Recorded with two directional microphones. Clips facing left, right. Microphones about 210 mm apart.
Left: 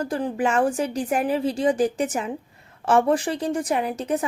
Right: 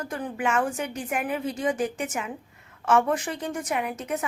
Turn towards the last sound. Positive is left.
turn(degrees=35)  # may be behind; listen again after turning